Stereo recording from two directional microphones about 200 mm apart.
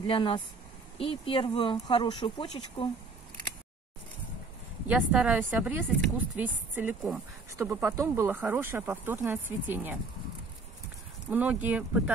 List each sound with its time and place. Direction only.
0.0 s speech: 25° left (ahead or behind)
4.8 s speech: 5° right (ahead or behind)
11.2 s speech: 10° right (ahead or behind)